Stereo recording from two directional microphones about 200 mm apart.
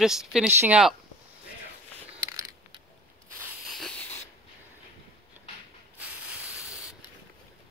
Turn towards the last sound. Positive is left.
turn(degrees=-5)  # may be behind; listen again after turning